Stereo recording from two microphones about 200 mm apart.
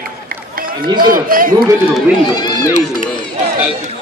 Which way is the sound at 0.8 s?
20° right (ahead or behind).